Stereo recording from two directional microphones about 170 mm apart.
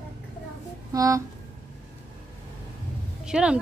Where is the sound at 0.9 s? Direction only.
20° right (ahead or behind).